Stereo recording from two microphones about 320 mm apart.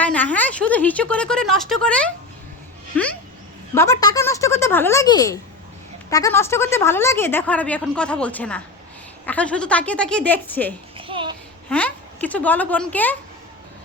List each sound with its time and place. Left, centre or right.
0.0 s speech: centre
3.8 s a woman's voice: centre
10.9 s a sound: centre
11.7 s speech: centre